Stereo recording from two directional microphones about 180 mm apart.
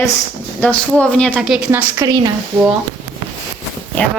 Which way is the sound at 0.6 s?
5° left (ahead or behind).